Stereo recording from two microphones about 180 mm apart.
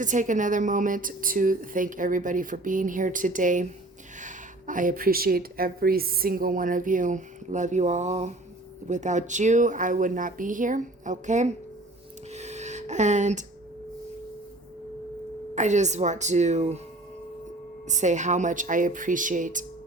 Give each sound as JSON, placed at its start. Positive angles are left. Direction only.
{"t": 0.0, "sound": "a woman's voice", "side_deg": -45}
{"t": 12.3, "sound": "a sound", "side_deg": -40}
{"t": 15.5, "sound": "a woman's voice", "side_deg": -40}
{"t": 17.8, "sound": "a woman's voice", "side_deg": -40}